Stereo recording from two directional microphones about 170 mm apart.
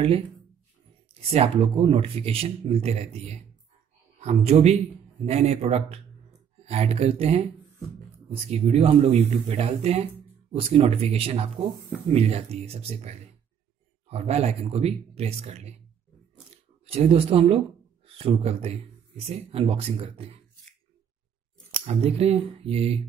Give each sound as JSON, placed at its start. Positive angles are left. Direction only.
{"t": 1.3, "sound": "a man's voice", "side_deg": -35}
{"t": 16.8, "sound": "speech", "side_deg": -35}
{"t": 21.8, "sound": "speech", "side_deg": -35}